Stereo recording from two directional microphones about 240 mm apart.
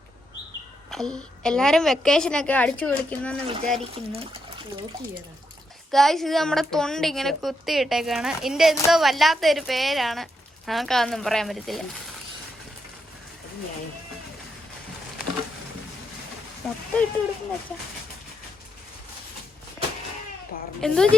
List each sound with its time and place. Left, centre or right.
0.9 s a woman's voice: centre
3.8 s speech: right
5.9 s a woman's voice: centre
16.6 s speech: centre
20.8 s a woman's voice: centre